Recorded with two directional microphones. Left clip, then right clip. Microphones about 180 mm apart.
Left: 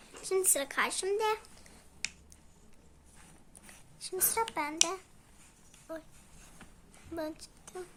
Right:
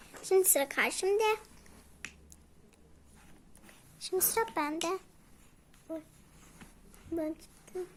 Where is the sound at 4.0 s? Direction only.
15° right (ahead or behind).